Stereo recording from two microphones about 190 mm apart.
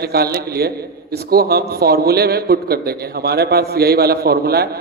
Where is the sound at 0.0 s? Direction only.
55° right (ahead or behind).